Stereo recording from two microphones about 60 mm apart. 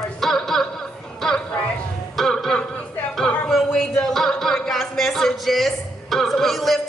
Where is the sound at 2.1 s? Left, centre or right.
Centre.